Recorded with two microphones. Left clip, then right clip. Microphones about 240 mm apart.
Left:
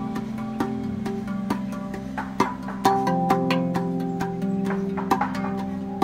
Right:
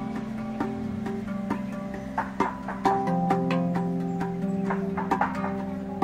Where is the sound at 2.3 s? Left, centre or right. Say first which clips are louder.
Left 3 dB; left.